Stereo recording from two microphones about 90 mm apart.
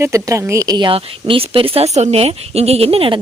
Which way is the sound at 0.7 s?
70° right (ahead or behind).